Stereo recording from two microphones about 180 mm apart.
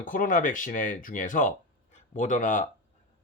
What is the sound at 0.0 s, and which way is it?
Speech, 50° left (ahead or behind).